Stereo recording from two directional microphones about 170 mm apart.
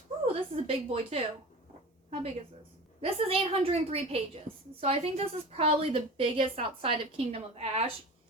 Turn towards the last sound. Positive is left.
turn(degrees=-35)  # may be behind; listen again after turning